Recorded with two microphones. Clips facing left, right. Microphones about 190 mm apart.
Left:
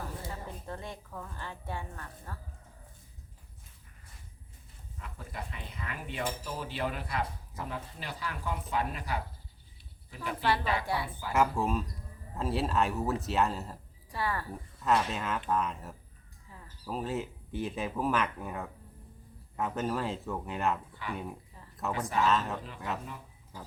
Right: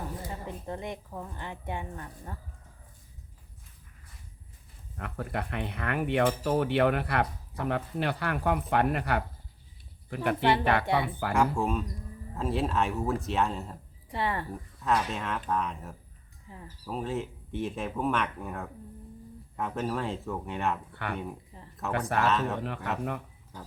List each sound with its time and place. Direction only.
0.4 s a woman's voice: 20° right (ahead or behind)
4.9 s cutlery: 65° right (ahead or behind)
11.3 s speech: centre (ahead or behind)
14.1 s a woman's voice: 25° right (ahead or behind)
14.8 s speech: centre (ahead or behind)
16.5 s bird: 25° right (ahead or behind)
16.8 s speech: centre (ahead or behind)
20.9 s speech: 65° right (ahead or behind)
21.9 s cutlery: 65° right (ahead or behind)
22.3 s speech: centre (ahead or behind)
22.6 s cutlery: 65° right (ahead or behind)